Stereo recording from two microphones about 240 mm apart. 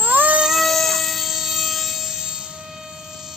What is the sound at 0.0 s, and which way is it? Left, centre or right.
Baby cry, centre.